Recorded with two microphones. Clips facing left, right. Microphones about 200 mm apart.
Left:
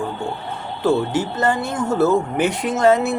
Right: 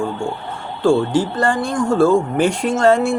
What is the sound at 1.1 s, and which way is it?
Speech, 20° left (ahead or behind).